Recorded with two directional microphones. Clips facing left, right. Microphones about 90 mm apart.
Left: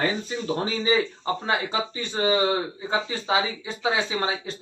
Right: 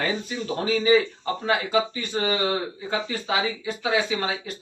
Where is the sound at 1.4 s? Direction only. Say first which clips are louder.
Right 5 dB; 25° left (ahead or behind).